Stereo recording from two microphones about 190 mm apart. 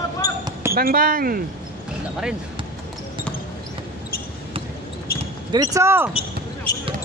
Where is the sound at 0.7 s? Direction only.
50° right (ahead or behind).